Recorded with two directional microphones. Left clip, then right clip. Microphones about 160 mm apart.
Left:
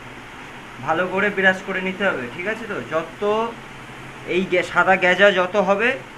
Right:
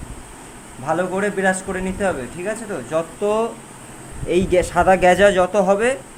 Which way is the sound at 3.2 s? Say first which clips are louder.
Even; 65° right (ahead or behind).